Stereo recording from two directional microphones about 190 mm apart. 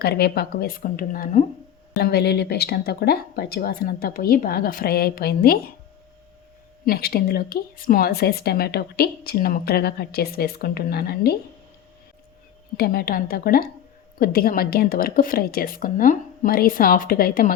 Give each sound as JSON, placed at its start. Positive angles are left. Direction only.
{"t": 0.0, "sound": "speech", "side_deg": 55}
{"t": 2.0, "sound": "speech", "side_deg": 60}
{"t": 6.8, "sound": "a woman's voice", "side_deg": 50}
{"t": 12.7, "sound": "speech", "side_deg": 55}